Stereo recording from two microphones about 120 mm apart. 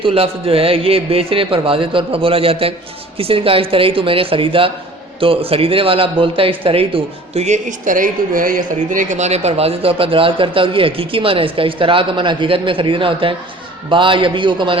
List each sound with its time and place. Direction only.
0.0 s speech: 50° right (ahead or behind)